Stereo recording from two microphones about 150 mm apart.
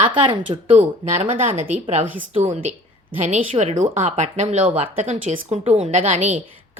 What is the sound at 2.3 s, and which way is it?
A woman's voice, 50° right (ahead or behind).